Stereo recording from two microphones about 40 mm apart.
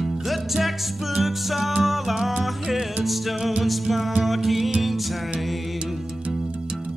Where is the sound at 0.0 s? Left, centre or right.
Centre.